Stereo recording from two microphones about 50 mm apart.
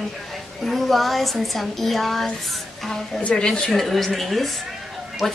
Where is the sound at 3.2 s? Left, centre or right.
Left.